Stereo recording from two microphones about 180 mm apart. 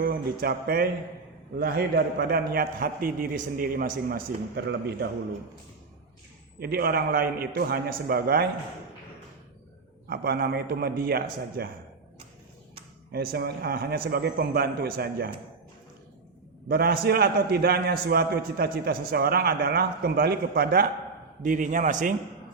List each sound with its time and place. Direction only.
0.0 s a man's voice: 60° right (ahead or behind)
6.6 s a man's voice: 60° right (ahead or behind)
10.1 s a man's voice: 60° right (ahead or behind)
13.1 s a man's voice: 60° right (ahead or behind)
16.6 s a man's voice: 55° right (ahead or behind)